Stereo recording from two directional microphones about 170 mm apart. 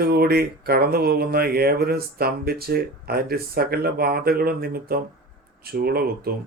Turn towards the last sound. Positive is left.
turn(degrees=-65)  # may be behind; listen again after turning